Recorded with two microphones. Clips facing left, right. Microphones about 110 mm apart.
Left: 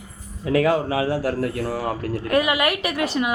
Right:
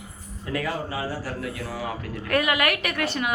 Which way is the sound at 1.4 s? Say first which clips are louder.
Left 7 dB; 50° left (ahead or behind).